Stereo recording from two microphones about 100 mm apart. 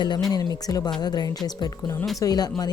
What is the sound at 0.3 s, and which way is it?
Speech, 40° left (ahead or behind).